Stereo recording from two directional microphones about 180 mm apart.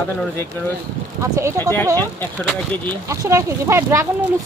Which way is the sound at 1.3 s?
15° right (ahead or behind).